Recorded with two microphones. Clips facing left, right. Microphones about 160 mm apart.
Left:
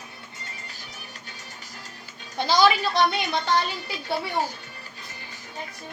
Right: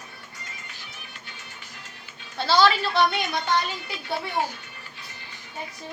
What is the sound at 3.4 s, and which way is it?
Speech, 40° left (ahead or behind).